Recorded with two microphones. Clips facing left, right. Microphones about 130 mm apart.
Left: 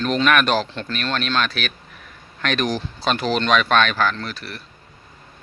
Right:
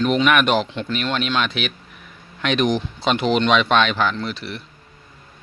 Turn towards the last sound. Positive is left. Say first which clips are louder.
# right 4 dB
turn(degrees=-20)  # may be behind; listen again after turning